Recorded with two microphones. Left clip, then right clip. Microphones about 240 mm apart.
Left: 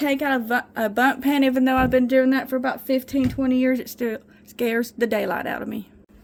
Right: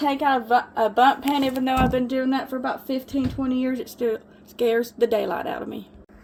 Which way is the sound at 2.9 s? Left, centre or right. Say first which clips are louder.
Left 4 dB; left.